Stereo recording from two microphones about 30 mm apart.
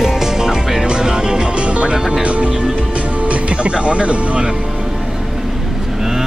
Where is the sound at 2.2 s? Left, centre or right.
Right.